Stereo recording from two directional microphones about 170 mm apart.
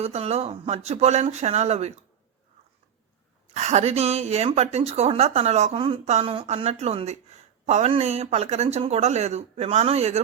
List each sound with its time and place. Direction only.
0.0 s speech: 40° right (ahead or behind)
3.5 s speech: 40° right (ahead or behind)